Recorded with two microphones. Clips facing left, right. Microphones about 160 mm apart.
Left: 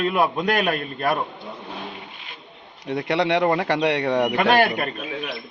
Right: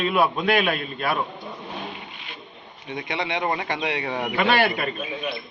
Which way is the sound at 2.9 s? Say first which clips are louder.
Left 7 dB; 80° left.